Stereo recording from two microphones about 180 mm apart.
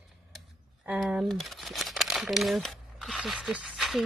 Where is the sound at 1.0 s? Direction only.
Centre (ahead or behind).